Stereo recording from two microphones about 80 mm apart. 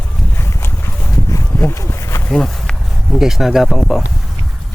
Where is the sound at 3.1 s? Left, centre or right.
Centre.